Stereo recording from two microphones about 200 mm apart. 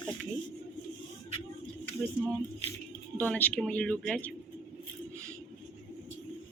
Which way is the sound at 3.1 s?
5° left (ahead or behind).